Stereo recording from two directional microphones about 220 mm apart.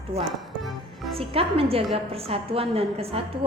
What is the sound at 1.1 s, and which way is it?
A woman's voice, 25° right (ahead or behind).